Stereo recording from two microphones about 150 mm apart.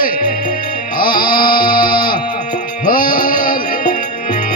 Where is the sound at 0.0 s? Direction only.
70° left (ahead or behind).